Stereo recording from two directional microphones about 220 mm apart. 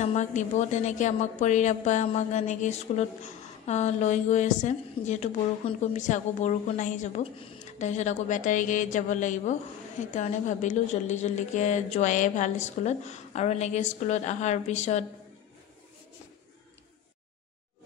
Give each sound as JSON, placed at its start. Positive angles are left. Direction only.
{"t": 0.0, "sound": "a woman's voice", "side_deg": 30}